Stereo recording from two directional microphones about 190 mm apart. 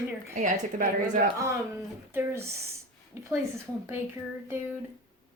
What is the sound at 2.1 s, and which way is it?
Speech, 15° right (ahead or behind).